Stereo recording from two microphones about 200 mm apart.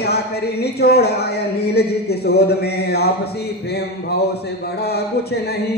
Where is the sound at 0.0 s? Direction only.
55° left (ahead or behind).